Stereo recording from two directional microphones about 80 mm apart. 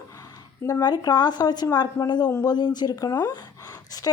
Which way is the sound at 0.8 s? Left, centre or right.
Left.